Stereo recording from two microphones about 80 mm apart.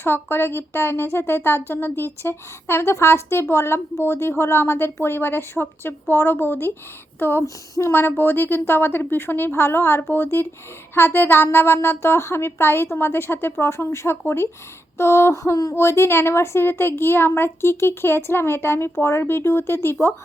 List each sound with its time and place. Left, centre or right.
0.0 s speech: left